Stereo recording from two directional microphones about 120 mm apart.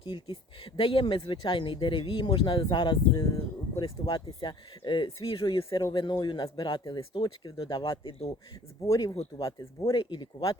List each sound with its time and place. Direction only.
0.0 s speech: 45° left (ahead or behind)